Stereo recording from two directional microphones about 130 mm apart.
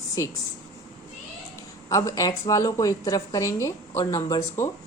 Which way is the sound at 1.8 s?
25° left (ahead or behind).